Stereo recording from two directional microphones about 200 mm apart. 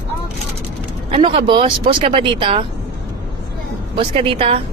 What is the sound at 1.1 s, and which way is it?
Speech, 25° right (ahead or behind).